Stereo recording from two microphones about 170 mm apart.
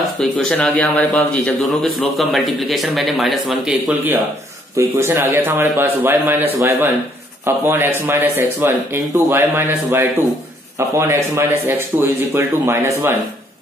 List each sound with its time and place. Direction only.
0.2 s speech: 5° left (ahead or behind); by 12.9 s 15° right (ahead or behind)